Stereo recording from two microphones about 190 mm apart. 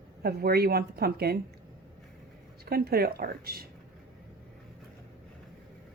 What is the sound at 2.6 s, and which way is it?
A woman's voice, 55° right (ahead or behind).